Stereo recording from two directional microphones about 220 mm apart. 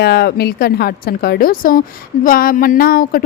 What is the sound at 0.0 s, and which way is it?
A woman's voice, 45° left (ahead or behind).